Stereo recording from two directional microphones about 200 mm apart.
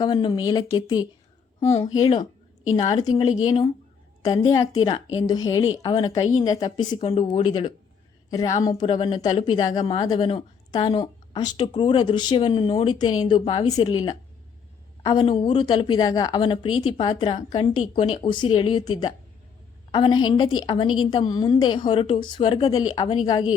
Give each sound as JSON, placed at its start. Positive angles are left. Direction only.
{"t": 0.0, "sound": "a woman's voice", "side_deg": 20}